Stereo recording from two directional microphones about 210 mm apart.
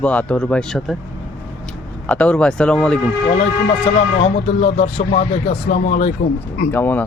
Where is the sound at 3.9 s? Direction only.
30° left (ahead or behind).